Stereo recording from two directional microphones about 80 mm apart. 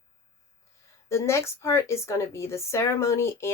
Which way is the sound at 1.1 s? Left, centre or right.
Left.